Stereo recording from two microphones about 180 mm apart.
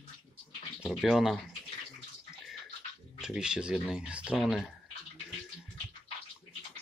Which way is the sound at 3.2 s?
5° right (ahead or behind).